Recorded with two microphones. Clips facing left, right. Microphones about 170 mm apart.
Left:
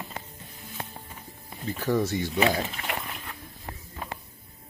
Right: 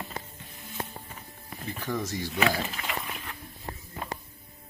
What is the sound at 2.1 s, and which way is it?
Speech, 25° left (ahead or behind).